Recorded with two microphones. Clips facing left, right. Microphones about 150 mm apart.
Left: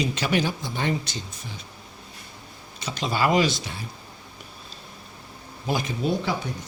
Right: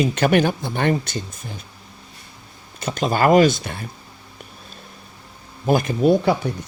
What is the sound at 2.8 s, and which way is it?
Speech, 50° right (ahead or behind).